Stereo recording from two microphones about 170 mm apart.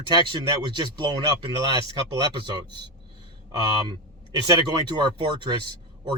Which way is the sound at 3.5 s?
25° right (ahead or behind).